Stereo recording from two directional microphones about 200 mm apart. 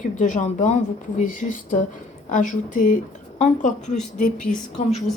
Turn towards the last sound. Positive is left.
turn(degrees=35)  # may be behind; listen again after turning